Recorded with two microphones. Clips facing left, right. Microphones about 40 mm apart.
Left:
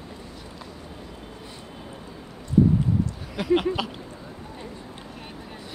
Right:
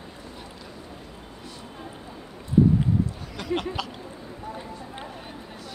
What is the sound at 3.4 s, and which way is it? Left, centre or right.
Speech, centre.